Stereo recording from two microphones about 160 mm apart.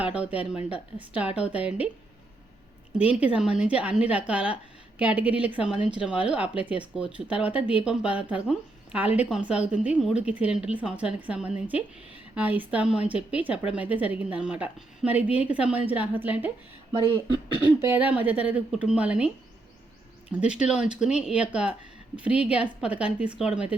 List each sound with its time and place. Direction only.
0.1 s speech: 10° right (ahead or behind)
3.2 s speech: 5° right (ahead or behind)
16.9 s speech: 30° right (ahead or behind)
17.7 s speech: 15° right (ahead or behind)
20.3 s speech: 5° right (ahead or behind)